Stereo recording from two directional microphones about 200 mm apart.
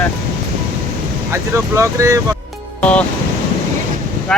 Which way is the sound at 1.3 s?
15° right (ahead or behind).